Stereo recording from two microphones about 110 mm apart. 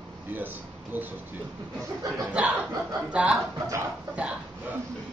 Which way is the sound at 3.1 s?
10° right (ahead or behind).